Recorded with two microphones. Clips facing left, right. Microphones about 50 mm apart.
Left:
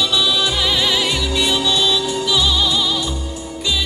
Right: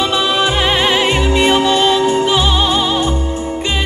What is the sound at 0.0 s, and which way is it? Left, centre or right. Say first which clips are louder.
Music: right 4 dB; right.